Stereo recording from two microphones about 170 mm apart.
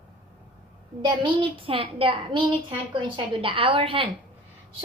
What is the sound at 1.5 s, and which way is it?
A woman's voice, 30° right (ahead or behind).